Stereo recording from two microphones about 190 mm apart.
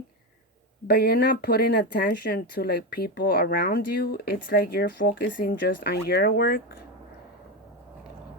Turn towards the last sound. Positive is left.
turn(degrees=50)  # may be behind; listen again after turning